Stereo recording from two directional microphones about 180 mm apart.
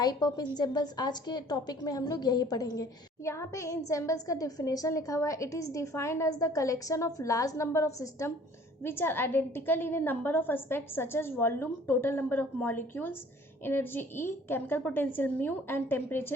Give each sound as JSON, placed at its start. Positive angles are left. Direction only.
{"t": 0.0, "sound": "a woman's voice", "side_deg": 20}